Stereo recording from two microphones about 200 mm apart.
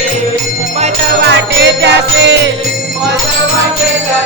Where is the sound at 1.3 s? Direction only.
60° right (ahead or behind).